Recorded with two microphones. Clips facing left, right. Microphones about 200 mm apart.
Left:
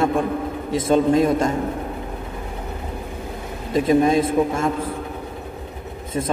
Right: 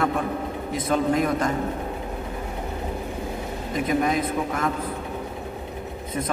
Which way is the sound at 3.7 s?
30° left (ahead or behind).